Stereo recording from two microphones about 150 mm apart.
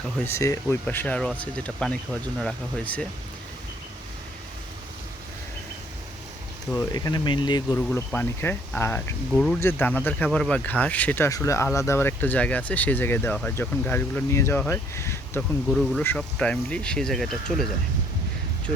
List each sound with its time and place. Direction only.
0.3 s speech: 20° left (ahead or behind)
6.7 s speech: 25° left (ahead or behind)
7.8 s speech: 10° left (ahead or behind)
11.3 s speech: 20° left (ahead or behind)
15.4 s speech: centre (ahead or behind)